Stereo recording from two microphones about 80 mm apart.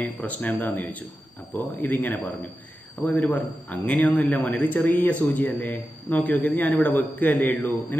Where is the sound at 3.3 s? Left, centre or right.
Centre.